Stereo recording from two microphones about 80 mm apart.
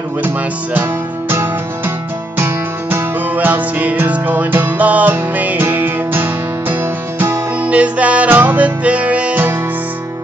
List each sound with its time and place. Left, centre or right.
2.3 s music: right